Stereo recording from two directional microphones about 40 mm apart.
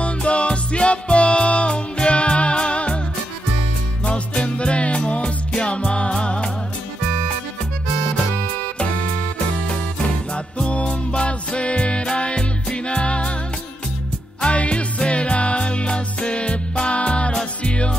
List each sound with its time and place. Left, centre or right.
0.0 s music: left
4.0 s music: left
9.7 s music: left
14.4 s music: left